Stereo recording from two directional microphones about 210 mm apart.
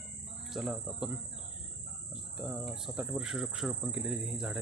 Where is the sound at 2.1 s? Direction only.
5° right (ahead or behind).